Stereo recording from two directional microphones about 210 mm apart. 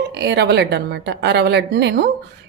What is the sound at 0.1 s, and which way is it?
A woman's voice, 55° right (ahead or behind).